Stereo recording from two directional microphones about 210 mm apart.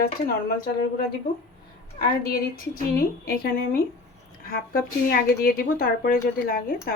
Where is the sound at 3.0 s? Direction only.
45° left (ahead or behind).